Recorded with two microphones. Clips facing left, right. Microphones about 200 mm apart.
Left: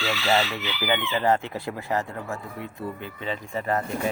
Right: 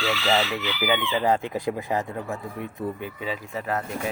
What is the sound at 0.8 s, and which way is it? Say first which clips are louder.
Speech: right 1 dB; 10° right (ahead or behind).